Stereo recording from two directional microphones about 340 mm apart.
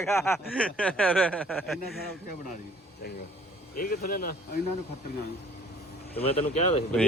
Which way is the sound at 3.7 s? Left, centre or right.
Left.